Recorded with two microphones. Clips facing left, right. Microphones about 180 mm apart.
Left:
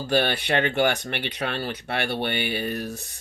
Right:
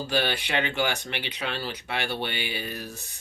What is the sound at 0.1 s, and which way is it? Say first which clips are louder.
Speech: left 5 dB; 50° left (ahead or behind).